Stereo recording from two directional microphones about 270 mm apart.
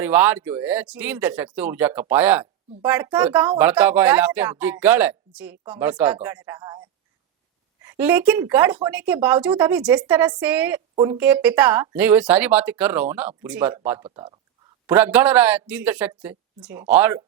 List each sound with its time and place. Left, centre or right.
0.0 s speech: centre
7.8 s speech: centre
14.0 s speech: centre
14.8 s speech: centre